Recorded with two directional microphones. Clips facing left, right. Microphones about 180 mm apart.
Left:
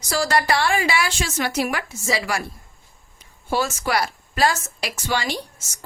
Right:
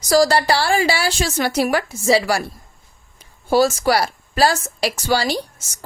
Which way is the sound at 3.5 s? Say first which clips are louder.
Right 7 dB; 35° right (ahead or behind).